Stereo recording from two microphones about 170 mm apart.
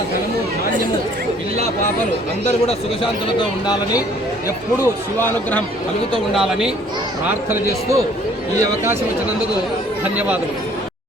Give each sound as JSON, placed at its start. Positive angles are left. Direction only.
{"t": 2.6, "sound": "a man's voice", "side_deg": 30}
{"t": 5.2, "sound": "speech", "side_deg": 10}
{"t": 6.3, "sound": "speech", "side_deg": -5}
{"t": 7.3, "sound": "a man's voice", "side_deg": -15}
{"t": 10.0, "sound": "a man's voice", "side_deg": -10}